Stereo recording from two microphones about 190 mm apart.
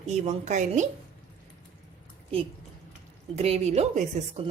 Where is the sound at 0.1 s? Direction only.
35° right (ahead or behind).